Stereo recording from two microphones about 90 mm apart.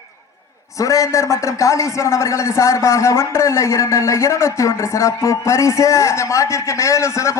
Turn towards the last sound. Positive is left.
turn(degrees=35)  # may be behind; listen again after turning